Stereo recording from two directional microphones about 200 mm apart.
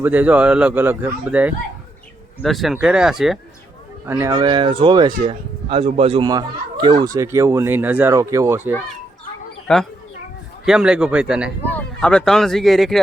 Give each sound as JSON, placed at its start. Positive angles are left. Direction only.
{"t": 0.0, "sound": "a man's voice", "side_deg": -10}
{"t": 4.0, "sound": "speech", "side_deg": -15}
{"t": 9.7, "sound": "speech", "side_deg": 5}
{"t": 11.6, "sound": "speech", "side_deg": 10}